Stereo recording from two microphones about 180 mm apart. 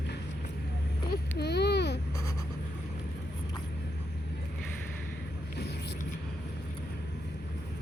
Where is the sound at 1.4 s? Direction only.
65° left (ahead or behind).